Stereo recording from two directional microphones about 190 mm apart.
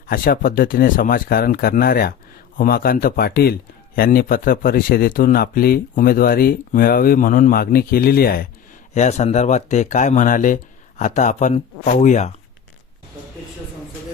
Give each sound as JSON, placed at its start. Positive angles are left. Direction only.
{"t": 0.1, "sound": "a man's voice", "side_deg": 50}
{"t": 9.0, "sound": "speech", "side_deg": 35}